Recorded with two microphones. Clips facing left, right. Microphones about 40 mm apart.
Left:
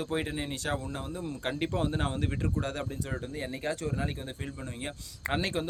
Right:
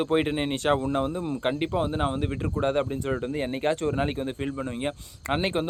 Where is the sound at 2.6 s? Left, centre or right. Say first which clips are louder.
Right 9 dB; right.